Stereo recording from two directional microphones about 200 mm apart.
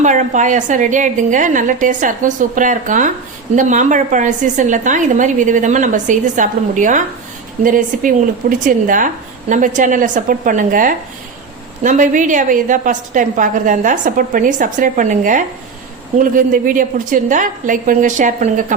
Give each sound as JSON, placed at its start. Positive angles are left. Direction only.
{"t": 0.0, "sound": "a woman's voice", "side_deg": -40}